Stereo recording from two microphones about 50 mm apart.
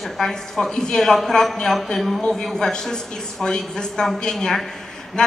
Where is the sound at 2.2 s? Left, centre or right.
Centre.